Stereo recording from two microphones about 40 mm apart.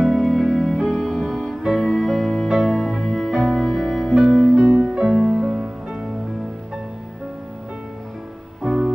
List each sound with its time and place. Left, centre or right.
0.0 s music: centre
1.6 s music: centre
4.6 s music: centre
8.6 s music: centre